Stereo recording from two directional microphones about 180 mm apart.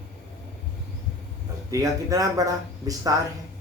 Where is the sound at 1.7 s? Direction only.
20° right (ahead or behind).